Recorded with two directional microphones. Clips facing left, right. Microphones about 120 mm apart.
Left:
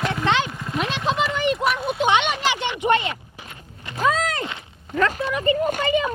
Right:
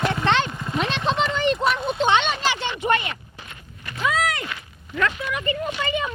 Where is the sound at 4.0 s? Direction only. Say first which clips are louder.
Left 2 dB; 40° left (ahead or behind).